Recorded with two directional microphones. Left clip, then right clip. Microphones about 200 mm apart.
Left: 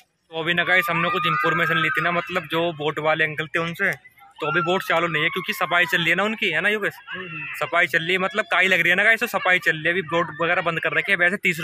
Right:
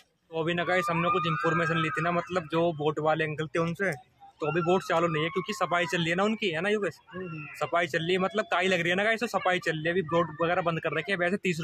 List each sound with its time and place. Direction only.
0.4 s speech: 5° left (ahead or behind)